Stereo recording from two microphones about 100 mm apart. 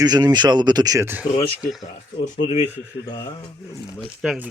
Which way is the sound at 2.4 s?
90° left.